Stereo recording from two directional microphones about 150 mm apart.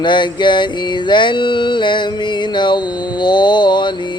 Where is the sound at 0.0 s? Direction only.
30° left (ahead or behind).